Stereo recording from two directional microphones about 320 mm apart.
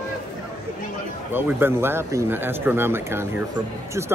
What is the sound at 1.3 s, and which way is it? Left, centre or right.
Speech, centre.